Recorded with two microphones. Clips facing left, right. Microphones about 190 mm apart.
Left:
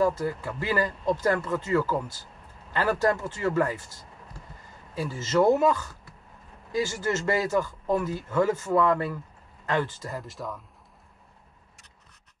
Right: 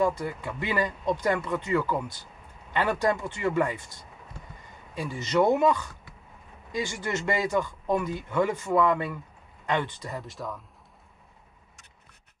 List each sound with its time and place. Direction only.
0.0 s speech: centre (ahead or behind)
4.6 s a sound: centre (ahead or behind)
5.3 s speech: centre (ahead or behind)
8.7 s speech: 20° right (ahead or behind)
9.8 s speech: centre (ahead or behind)